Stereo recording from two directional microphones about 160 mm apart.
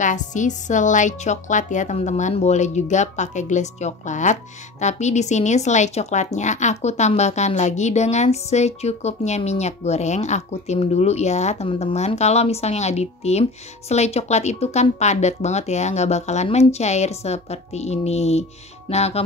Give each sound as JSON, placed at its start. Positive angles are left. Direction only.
{"t": 0.0, "sound": "a woman's voice", "side_deg": 50}